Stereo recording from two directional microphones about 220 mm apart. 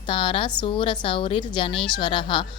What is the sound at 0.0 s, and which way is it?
A woman's voice, 25° left (ahead or behind).